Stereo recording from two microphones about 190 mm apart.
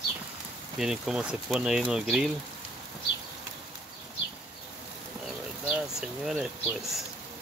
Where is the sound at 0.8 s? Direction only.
5° right (ahead or behind).